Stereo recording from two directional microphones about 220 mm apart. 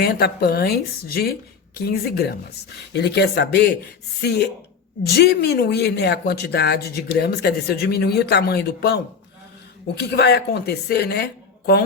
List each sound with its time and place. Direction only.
0.0 s speech: 45° left (ahead or behind)